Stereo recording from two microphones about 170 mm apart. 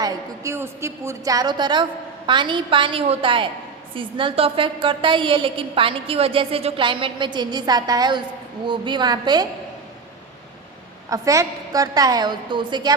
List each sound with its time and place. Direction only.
0.0 s a woman's voice: 20° right (ahead or behind)
11.1 s a woman's voice: 20° right (ahead or behind)